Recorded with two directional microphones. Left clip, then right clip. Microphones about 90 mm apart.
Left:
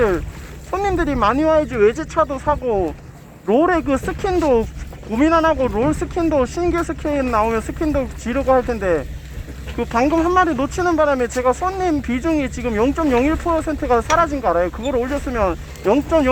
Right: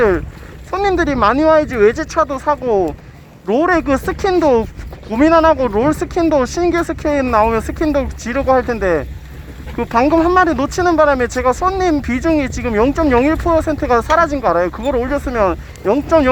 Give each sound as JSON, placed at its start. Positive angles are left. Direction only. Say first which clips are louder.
{"t": 0.7, "sound": "speech", "louder": "right 4 dB", "side_deg": -35}